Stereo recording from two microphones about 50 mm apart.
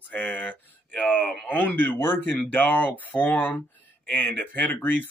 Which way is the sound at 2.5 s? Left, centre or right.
Left.